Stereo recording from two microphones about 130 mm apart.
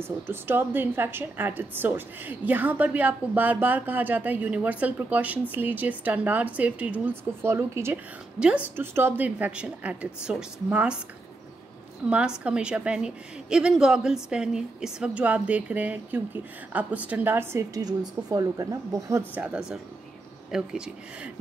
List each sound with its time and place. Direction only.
0.0 s a woman's voice: 15° right (ahead or behind)
8.4 s a woman's voice: 10° right (ahead or behind)
12.0 s a woman's voice: 10° right (ahead or behind)
19.3 s a woman's voice: 10° right (ahead or behind)